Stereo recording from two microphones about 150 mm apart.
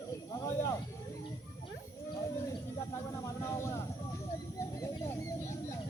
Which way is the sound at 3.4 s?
20° left (ahead or behind).